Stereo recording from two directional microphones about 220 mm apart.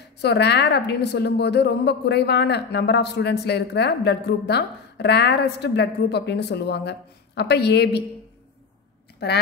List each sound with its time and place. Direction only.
0.0 s a woman's voice: 50° left (ahead or behind)
9.2 s a woman's voice: 50° left (ahead or behind)